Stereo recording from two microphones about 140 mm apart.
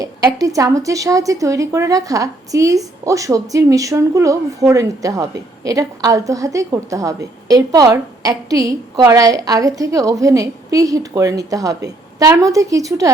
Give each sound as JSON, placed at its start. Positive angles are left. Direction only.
{"t": 0.3, "sound": "a woman's voice", "side_deg": -25}